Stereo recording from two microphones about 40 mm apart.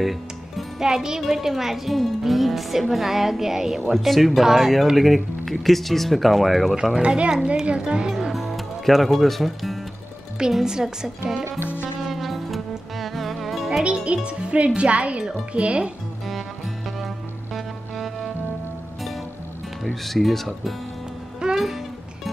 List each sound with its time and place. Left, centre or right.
0.0 s music: centre
0.7 s a woman's voice: centre
3.9 s a woman's voice: centre
7.0 s speech: right
8.1 s music: centre
10.6 s a woman's voice: centre
11.6 s music: left
12.1 s music: centre
14.0 s speech: right
17.6 s music: centre
19.8 s speech: centre
21.4 s music: right